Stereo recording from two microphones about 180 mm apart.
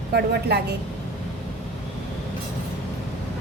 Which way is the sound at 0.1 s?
65° right (ahead or behind).